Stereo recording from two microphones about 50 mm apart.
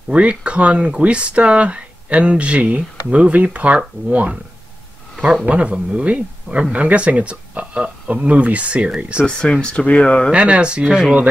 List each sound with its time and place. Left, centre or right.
0.1 s speech: right
5.5 s speech: right
9.2 s speech: centre
10.3 s speech: right